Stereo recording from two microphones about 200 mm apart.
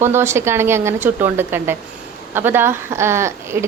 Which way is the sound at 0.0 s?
10° right (ahead or behind).